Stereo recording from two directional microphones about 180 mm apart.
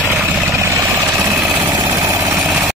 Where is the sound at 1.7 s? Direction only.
20° right (ahead or behind).